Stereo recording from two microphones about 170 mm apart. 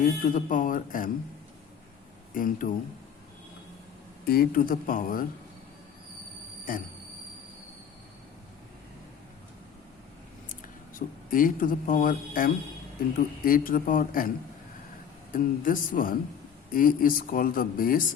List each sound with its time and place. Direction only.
0.0 s speech: 50° left (ahead or behind)
2.3 s speech: 55° left (ahead or behind)
4.3 s speech: 60° left (ahead or behind)
6.7 s speech: 55° left (ahead or behind)
10.5 s speech: 55° left (ahead or behind)
15.3 s speech: 55° left (ahead or behind)